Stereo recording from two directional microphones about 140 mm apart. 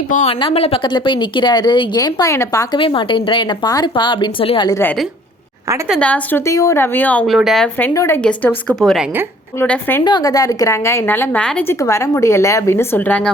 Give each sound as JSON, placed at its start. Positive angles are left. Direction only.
{"t": 0.3, "sound": "speech", "side_deg": 40}
{"t": 2.7, "sound": "speech", "side_deg": 35}
{"t": 4.7, "sound": "a woman's voice", "side_deg": 15}
{"t": 6.0, "sound": "a woman's voice", "side_deg": 10}
{"t": 7.3, "sound": "speech", "side_deg": 0}
{"t": 7.8, "sound": "a woman's voice", "side_deg": 15}
{"t": 9.6, "sound": "a woman's voice", "side_deg": 15}
{"t": 10.0, "sound": "a woman's voice", "side_deg": 30}
{"t": 11.8, "sound": "a woman's voice", "side_deg": 20}